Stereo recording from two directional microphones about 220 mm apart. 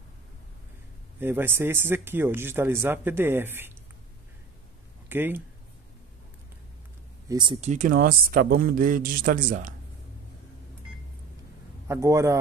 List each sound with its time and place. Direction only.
1.2 s speech: 10° right (ahead or behind)
5.1 s speech: 10° right (ahead or behind)
7.2 s speech: 20° right (ahead or behind); by 9.8 s 40° right (ahead or behind)
11.9 s speech: 15° right (ahead or behind)